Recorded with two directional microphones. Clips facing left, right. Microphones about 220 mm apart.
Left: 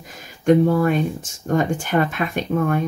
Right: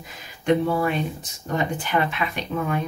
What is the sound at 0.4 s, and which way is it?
Speech, 45° left (ahead or behind).